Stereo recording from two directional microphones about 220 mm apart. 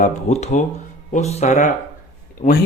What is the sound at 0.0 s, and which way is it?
Speech, 30° left (ahead or behind).